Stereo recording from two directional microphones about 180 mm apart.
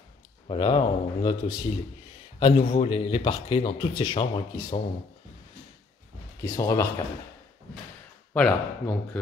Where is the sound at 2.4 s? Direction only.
35° left (ahead or behind).